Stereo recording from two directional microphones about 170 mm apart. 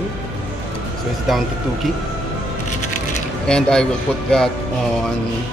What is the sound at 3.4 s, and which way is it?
Speech, 5° left (ahead or behind).